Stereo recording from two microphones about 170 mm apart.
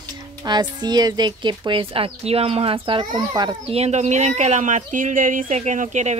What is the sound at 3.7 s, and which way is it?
Speech, 40° right (ahead or behind).